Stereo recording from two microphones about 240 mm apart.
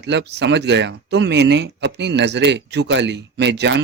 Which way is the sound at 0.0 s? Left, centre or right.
Right.